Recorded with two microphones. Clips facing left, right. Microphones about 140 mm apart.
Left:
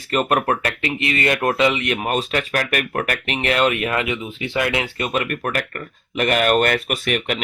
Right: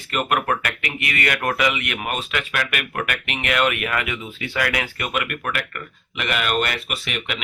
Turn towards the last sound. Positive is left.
turn(degrees=45)  # may be behind; listen again after turning